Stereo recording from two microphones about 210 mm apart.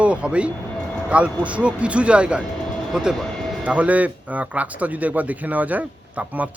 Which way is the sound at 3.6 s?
5° right (ahead or behind).